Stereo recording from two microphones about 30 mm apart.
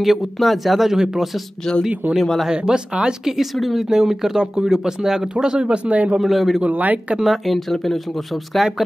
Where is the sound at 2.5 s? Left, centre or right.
Right.